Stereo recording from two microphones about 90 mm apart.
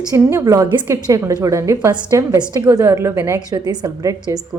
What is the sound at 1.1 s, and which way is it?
A woman's voice, 35° right (ahead or behind).